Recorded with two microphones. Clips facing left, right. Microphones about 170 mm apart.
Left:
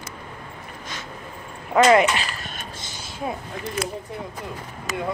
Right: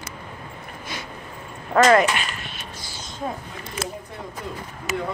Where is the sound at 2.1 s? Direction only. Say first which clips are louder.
Even; 35° left (ahead or behind).